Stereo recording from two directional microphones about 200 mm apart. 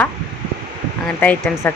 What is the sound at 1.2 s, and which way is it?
Speech, 10° left (ahead or behind).